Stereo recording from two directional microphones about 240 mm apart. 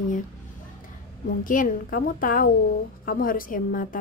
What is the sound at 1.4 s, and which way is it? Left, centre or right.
A woman's voice, left.